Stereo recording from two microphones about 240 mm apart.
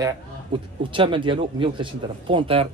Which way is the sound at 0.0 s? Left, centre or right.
Right.